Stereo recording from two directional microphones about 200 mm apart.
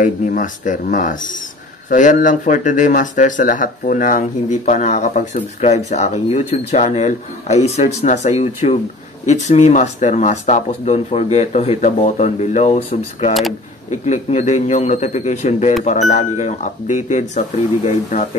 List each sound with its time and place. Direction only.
0.0 s speech: 40° left (ahead or behind)